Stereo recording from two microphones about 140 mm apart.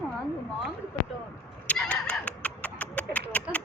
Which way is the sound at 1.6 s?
10° left (ahead or behind).